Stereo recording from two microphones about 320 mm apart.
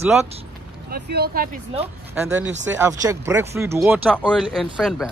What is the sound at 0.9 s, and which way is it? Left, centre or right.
Speech, right.